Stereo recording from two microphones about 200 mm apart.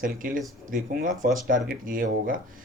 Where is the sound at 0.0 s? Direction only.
45° right (ahead or behind).